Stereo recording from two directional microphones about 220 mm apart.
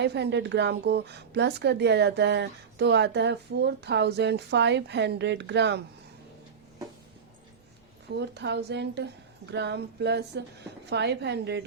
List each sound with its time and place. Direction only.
0.0 s speech: 50° right (ahead or behind)
8.1 s speech: 50° right (ahead or behind)